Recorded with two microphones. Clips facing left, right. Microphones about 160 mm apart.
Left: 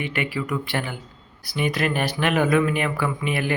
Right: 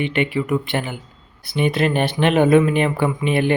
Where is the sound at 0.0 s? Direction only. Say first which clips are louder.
Right 6 dB; 25° right (ahead or behind).